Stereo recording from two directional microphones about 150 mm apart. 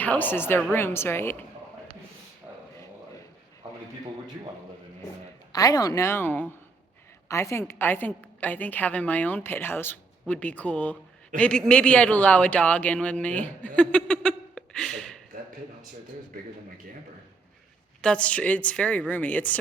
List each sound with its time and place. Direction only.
0.0 s a woman's voice: 10° left (ahead or behind)
5.5 s a woman's voice: 25° left (ahead or behind)
13.7 s a sound: 5° left (ahead or behind)
18.0 s a woman's voice: 5° left (ahead or behind)